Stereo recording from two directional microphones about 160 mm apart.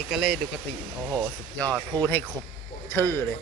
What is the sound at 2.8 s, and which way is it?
Speech, 15° left (ahead or behind).